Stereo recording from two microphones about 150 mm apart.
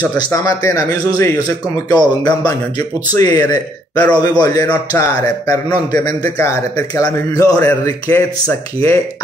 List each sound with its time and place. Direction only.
0.0 s a man's voice: 20° left (ahead or behind)
3.9 s a man's voice: 10° left (ahead or behind)
4.2 s a man's voice: 25° left (ahead or behind)